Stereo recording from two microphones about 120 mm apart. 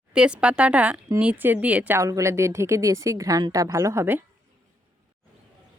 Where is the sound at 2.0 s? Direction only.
25° right (ahead or behind).